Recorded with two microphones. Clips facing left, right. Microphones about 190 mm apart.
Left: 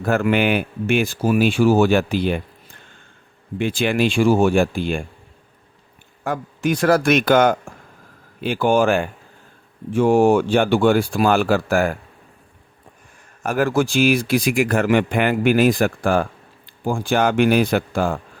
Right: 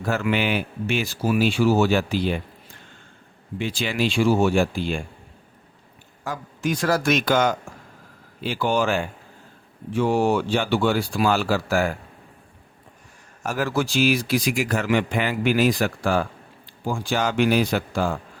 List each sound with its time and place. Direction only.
0.0 s speech: 50° left (ahead or behind)
3.6 s speech: 55° left (ahead or behind)
6.2 s a man's voice: 60° left (ahead or behind)
13.4 s a man's voice: 55° left (ahead or behind)